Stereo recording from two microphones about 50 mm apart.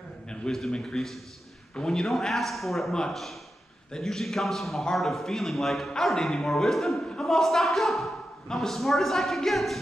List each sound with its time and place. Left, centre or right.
0.3 s a man's voice: centre
2.9 s a man's voice: centre